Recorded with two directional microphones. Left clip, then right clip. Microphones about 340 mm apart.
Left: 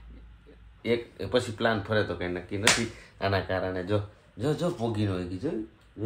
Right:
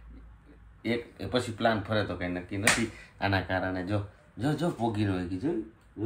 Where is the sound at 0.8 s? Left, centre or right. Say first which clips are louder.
Left 4 dB; centre.